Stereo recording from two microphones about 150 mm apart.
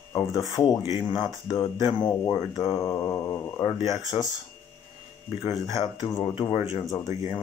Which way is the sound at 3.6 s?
35° left (ahead or behind).